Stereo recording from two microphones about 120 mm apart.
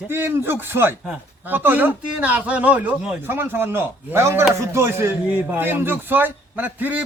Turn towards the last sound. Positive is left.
turn(degrees=-15)  # may be behind; listen again after turning